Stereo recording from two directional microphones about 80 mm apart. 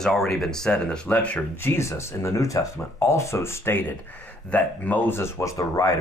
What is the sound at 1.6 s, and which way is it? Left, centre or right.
Speech, left.